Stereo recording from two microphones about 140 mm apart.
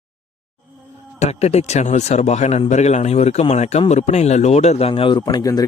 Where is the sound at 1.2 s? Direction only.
50° left (ahead or behind).